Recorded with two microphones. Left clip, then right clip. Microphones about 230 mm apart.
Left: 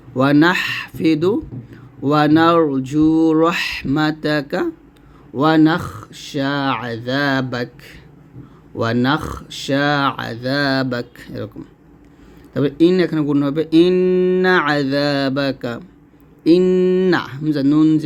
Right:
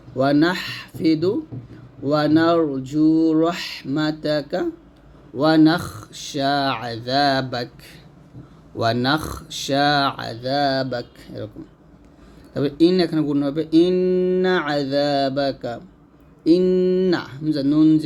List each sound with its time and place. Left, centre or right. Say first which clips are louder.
0.2 s speech: left 4 dB; left
12.5 s speech: left 3 dB; left